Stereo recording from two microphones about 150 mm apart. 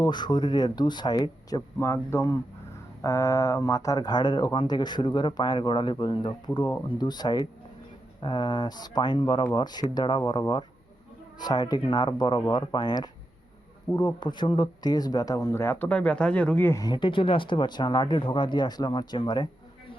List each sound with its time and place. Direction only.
0.0 s speech: 30° left (ahead or behind); by 16.8 s 15° left (ahead or behind)
16.8 s speech: 30° left (ahead or behind)